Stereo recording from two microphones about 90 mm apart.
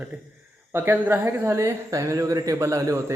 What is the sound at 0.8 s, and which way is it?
Speech, 20° right (ahead or behind).